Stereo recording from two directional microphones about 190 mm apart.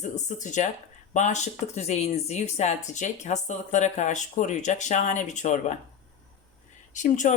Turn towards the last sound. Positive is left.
turn(degrees=40)  # may be behind; listen again after turning